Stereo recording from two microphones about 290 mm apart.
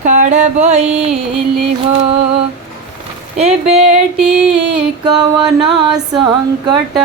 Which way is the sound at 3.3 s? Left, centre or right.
Right.